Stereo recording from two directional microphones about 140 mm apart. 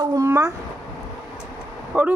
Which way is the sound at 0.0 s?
30° right (ahead or behind).